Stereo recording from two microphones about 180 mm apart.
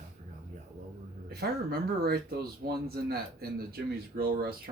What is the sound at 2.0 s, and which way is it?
Speech, 60° right (ahead or behind).